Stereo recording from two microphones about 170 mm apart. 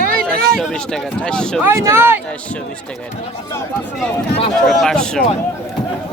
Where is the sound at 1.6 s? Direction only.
15° right (ahead or behind).